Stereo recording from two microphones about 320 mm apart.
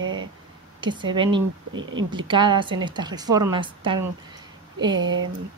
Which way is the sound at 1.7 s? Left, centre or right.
Right.